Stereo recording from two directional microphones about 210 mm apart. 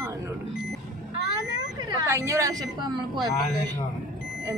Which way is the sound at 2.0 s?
15° right (ahead or behind).